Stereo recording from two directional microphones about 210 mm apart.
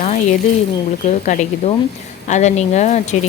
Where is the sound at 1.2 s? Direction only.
35° left (ahead or behind).